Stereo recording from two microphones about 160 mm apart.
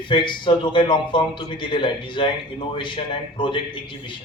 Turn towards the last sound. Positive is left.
turn(degrees=30)  # may be behind; listen again after turning